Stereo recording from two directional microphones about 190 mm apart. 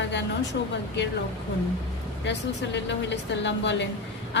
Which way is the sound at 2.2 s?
65° left (ahead or behind).